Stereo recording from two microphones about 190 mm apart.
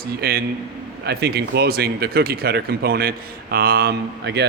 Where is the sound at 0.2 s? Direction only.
55° right (ahead or behind).